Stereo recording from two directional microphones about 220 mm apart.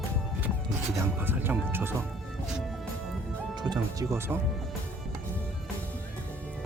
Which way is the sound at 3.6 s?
20° right (ahead or behind).